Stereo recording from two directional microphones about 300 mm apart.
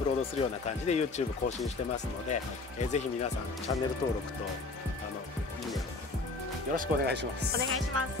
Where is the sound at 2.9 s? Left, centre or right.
Centre.